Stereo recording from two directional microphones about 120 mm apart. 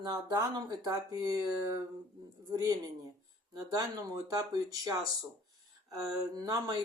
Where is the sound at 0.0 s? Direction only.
35° right (ahead or behind).